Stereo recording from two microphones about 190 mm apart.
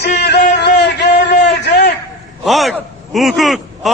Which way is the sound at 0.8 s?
65° left (ahead or behind).